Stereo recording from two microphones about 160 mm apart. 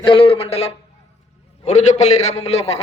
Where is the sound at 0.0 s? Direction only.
35° left (ahead or behind).